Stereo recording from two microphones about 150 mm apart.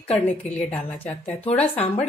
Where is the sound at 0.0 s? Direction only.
45° left (ahead or behind).